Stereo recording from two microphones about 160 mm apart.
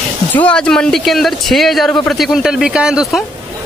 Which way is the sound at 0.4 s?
5° left (ahead or behind).